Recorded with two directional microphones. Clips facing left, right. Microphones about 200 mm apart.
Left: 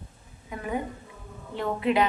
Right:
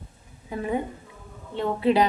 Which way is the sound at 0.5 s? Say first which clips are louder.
Right 4 dB; 30° right (ahead or behind).